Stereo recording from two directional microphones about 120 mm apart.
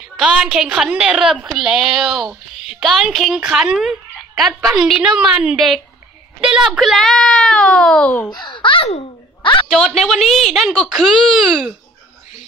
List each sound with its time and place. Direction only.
0.2 s a woman's voice: 5° right (ahead or behind); by 8.3 s 10° left (ahead or behind)
8.3 s a child's voice: 40° left (ahead or behind)
9.4 s a sound: 45° left (ahead or behind)
9.7 s a woman's voice: centre (ahead or behind)